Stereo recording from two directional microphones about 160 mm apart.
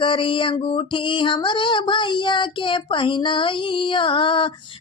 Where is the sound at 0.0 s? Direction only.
30° left (ahead or behind).